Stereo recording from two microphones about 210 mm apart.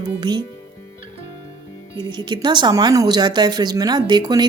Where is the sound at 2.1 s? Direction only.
20° right (ahead or behind).